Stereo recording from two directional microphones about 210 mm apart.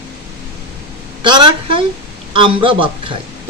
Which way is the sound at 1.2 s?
20° right (ahead or behind).